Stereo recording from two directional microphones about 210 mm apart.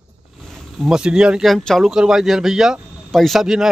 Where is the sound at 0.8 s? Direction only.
5° right (ahead or behind).